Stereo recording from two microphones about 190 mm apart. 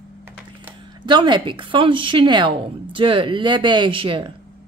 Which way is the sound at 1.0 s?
25° right (ahead or behind).